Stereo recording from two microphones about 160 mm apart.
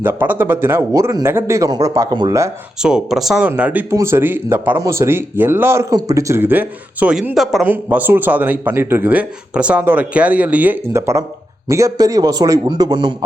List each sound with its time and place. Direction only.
0.0 s speech: 15° right (ahead or behind)
2.8 s a man's voice: 5° right (ahead or behind); by 13.1 s 25° right (ahead or behind)